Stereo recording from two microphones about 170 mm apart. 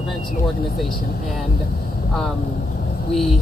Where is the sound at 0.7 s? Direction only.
Centre (ahead or behind).